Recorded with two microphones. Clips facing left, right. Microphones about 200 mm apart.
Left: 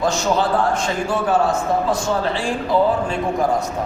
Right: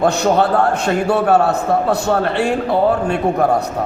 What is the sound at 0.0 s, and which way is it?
A man's voice, 60° right (ahead or behind).